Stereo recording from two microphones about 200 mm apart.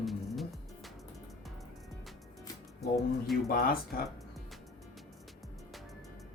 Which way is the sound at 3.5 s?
45° left (ahead or behind).